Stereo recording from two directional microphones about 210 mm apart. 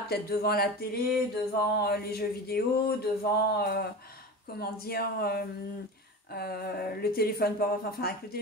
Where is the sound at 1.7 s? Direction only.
50° left (ahead or behind).